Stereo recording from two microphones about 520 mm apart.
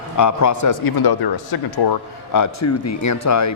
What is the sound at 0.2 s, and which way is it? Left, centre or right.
A man's voice, left.